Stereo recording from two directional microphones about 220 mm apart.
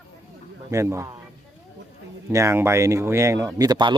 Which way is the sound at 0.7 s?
15° right (ahead or behind).